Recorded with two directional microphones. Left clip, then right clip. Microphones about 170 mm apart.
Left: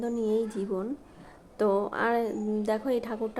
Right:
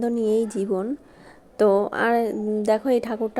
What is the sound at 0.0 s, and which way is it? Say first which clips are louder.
A woman's voice: right 6 dB; 40° right (ahead or behind).